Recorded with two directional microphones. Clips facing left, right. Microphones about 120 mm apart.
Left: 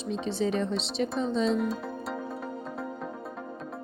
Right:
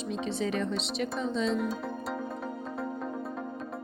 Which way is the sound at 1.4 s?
Centre (ahead or behind).